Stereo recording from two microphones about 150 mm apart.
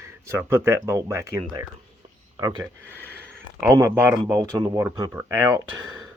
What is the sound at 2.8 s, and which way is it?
Speech, 15° left (ahead or behind).